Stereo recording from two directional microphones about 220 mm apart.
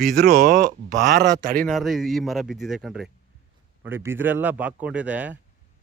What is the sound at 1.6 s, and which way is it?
Speech, centre (ahead or behind).